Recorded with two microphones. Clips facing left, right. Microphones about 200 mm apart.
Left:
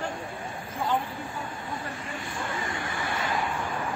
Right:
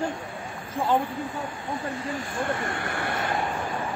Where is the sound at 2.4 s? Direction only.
60° right (ahead or behind).